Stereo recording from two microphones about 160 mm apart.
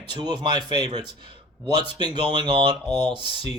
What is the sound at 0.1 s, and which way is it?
Speech, 30° right (ahead or behind).